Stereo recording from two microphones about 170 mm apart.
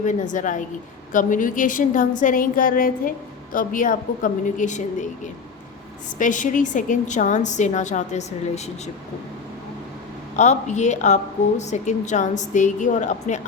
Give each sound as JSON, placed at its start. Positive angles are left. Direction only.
{"t": 0.0, "sound": "a woman's voice", "side_deg": 45}
{"t": 6.1, "sound": "a woman's voice", "side_deg": 50}
{"t": 10.3, "sound": "a woman's voice", "side_deg": 45}